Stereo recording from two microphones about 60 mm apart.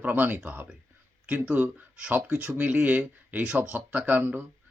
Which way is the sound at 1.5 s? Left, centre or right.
Right.